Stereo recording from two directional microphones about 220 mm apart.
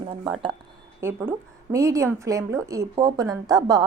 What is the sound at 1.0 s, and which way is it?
Speech, 10° right (ahead or behind).